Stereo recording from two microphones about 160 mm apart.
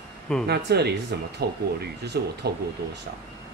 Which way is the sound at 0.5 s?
90° right.